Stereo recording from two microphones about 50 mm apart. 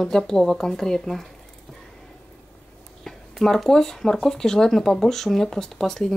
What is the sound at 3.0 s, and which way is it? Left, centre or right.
Speech, centre.